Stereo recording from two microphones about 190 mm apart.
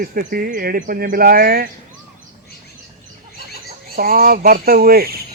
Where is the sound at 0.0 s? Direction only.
50° right (ahead or behind).